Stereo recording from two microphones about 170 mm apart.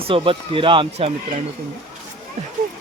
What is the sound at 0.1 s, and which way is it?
Speech, 30° right (ahead or behind).